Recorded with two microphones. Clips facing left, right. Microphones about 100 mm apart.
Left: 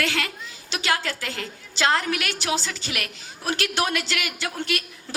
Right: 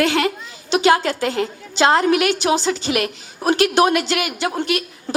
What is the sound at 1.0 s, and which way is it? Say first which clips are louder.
Speech: right 10 dB; 45° right (ahead or behind).